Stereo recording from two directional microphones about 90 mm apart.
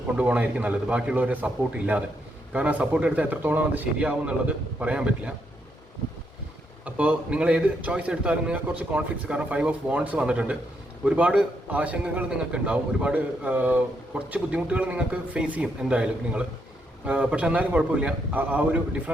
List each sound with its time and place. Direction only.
0.2 s a man's voice: 15° right (ahead or behind)
6.8 s a man's voice: 15° right (ahead or behind)